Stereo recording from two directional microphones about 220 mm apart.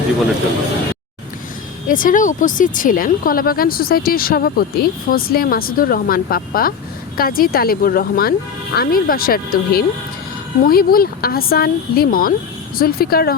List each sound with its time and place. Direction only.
1.9 s speech: 40° left (ahead or behind)